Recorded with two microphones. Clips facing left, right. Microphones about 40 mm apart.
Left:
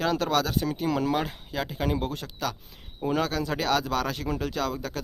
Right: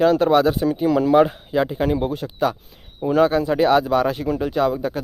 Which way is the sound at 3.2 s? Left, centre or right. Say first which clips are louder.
Right 11 dB; right.